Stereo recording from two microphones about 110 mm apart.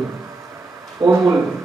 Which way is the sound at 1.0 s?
50° right (ahead or behind).